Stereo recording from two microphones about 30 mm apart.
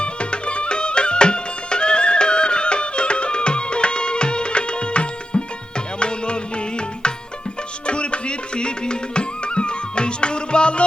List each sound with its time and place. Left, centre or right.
0.0 s music: left